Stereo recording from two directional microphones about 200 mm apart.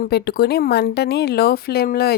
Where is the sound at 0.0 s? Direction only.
55° left (ahead or behind).